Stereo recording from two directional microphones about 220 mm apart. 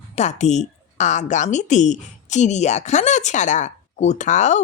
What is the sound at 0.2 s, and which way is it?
Speech, 30° left (ahead or behind).